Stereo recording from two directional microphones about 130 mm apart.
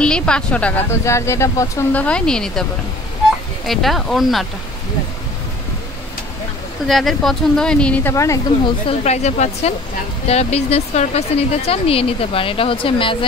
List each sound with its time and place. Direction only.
0.0 s a woman's voice: 5° left (ahead or behind)
0.8 s speech: 20° left (ahead or behind); by 2.6 s 5° left (ahead or behind)
3.6 s speech: centre (ahead or behind)
6.9 s speech: centre (ahead or behind)
8.1 s speech: 25° left (ahead or behind)
8.6 s speech: 50° left (ahead or behind)